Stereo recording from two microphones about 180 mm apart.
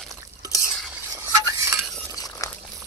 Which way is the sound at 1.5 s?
15° right (ahead or behind).